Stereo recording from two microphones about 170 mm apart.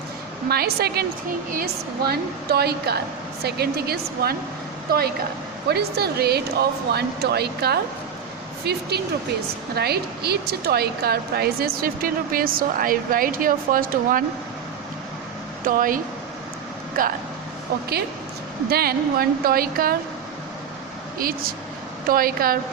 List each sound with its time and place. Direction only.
0.4 s a woman's voice: 65° right (ahead or behind)
8.9 s a woman's voice: 70° right (ahead or behind); by 14.3 s 55° right (ahead or behind)
15.6 s a woman's voice: 55° right (ahead or behind)
18.7 s a woman's voice: 65° right (ahead or behind)
21.2 s a woman's voice: 60° right (ahead or behind)